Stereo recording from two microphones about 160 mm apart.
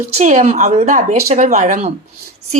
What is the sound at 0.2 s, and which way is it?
A woman's voice, 50° right (ahead or behind).